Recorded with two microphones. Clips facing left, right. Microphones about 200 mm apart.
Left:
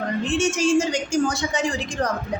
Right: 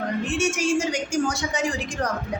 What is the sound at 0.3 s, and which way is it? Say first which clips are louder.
Speech: left 4 dB; 10° right (ahead or behind).